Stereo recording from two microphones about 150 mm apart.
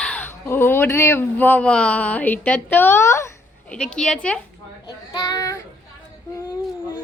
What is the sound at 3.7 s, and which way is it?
Speech, 5° left (ahead or behind).